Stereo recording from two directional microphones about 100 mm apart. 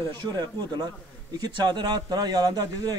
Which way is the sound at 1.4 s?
45° right (ahead or behind).